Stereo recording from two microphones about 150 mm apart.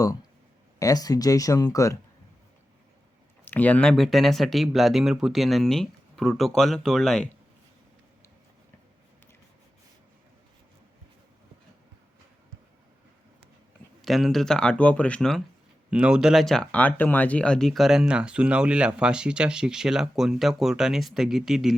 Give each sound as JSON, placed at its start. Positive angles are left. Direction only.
{"t": 0.8, "sound": "speech", "side_deg": 25}
{"t": 3.4, "sound": "speech", "side_deg": 10}
{"t": 14.0, "sound": "speech", "side_deg": 0}
{"t": 15.9, "sound": "speech", "side_deg": -5}